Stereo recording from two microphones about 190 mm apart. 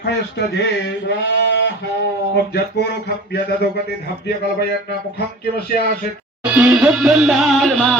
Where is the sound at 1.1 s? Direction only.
65° left (ahead or behind).